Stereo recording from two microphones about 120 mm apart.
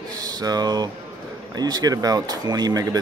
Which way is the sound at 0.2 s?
35° right (ahead or behind).